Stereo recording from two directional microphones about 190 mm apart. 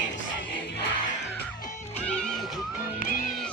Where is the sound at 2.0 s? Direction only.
5° left (ahead or behind).